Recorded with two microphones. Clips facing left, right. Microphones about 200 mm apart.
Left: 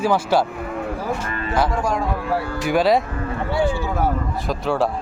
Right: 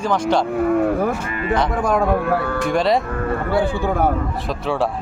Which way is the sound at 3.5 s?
60° right (ahead or behind).